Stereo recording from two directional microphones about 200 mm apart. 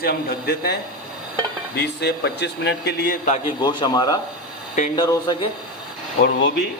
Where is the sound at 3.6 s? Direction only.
20° left (ahead or behind).